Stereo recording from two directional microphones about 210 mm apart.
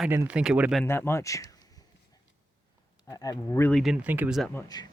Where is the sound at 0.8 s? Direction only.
10° left (ahead or behind).